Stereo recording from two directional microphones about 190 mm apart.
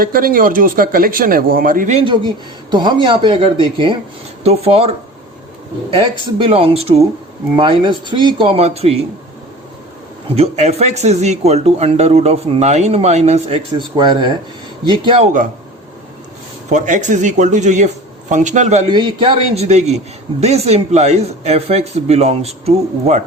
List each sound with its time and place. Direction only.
0.0 s speech: 50° right (ahead or behind)
2.0 s speech: 25° right (ahead or behind)
10.2 s speech: 30° right (ahead or behind)
16.7 s speech: 40° right (ahead or behind)
18.9 s speech: 25° right (ahead or behind)